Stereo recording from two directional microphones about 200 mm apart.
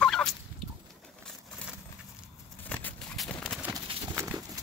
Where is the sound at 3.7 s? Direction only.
20° right (ahead or behind).